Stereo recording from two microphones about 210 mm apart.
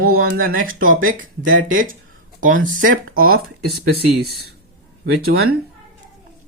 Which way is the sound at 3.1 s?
45° right (ahead or behind).